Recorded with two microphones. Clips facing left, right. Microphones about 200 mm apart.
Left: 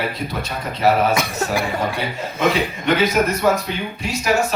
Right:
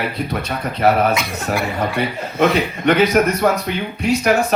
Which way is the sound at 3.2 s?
55° right (ahead or behind).